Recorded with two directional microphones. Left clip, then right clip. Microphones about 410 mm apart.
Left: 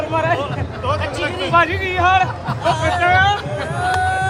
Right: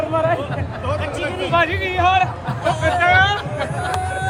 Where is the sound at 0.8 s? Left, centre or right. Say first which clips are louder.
Left 3 dB; left.